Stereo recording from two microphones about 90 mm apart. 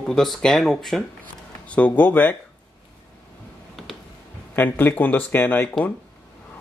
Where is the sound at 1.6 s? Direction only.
15° left (ahead or behind).